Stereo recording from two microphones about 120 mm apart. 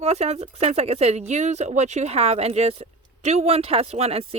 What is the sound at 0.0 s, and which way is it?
A woman's voice, 65° right (ahead or behind).